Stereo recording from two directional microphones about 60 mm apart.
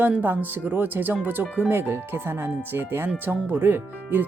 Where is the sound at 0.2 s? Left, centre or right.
Right.